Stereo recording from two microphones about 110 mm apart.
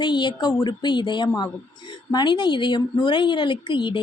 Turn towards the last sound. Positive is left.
turn(degrees=45)  # may be behind; listen again after turning